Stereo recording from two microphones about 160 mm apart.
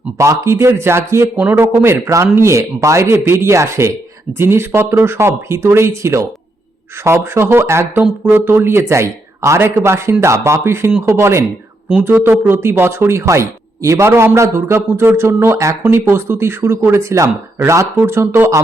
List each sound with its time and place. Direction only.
0.2 s speech: 15° right (ahead or behind)